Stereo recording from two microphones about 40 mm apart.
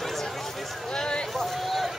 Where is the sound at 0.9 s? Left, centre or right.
Left.